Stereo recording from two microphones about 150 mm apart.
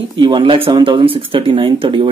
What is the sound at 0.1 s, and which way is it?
A man's voice, 35° right (ahead or behind).